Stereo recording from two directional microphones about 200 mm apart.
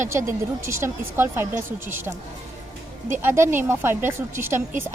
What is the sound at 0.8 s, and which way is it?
A woman's voice, 10° right (ahead or behind).